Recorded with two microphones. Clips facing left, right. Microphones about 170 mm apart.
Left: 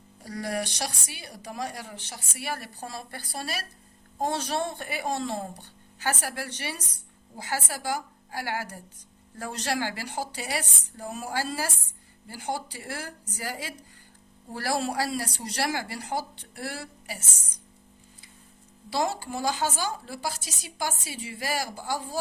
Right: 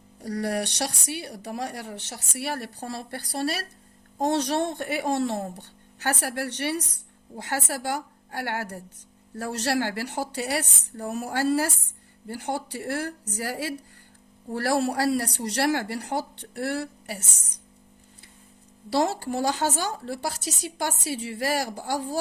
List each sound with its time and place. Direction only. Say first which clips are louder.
0.3 s a woman's voice: right 4 dB; 65° right (ahead or behind)
18.9 s a woman's voice: right 4 dB; 70° right (ahead or behind)